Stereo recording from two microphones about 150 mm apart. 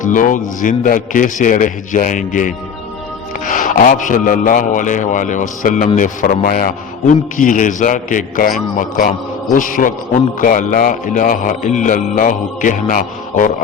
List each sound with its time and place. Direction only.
0.0 s a man's voice: 60° left (ahead or behind)